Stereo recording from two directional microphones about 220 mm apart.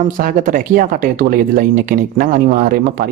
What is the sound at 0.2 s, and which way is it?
Speech, 40° right (ahead or behind).